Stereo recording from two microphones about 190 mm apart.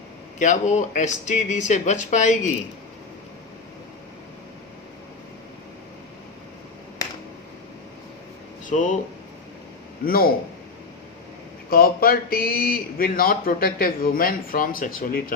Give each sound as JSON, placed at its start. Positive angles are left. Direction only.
{"t": 0.3, "sound": "speech", "side_deg": 40}
{"t": 8.6, "sound": "speech", "side_deg": 40}
{"t": 10.1, "sound": "a man's voice", "side_deg": 50}
{"t": 11.7, "sound": "a man's voice", "side_deg": 50}